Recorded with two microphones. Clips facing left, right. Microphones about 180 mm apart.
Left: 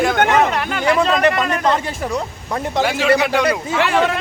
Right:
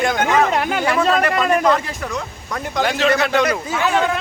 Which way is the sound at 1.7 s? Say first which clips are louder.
Left 3 dB; 30° left (ahead or behind).